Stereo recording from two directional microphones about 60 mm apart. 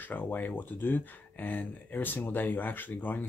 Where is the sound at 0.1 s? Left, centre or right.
Left.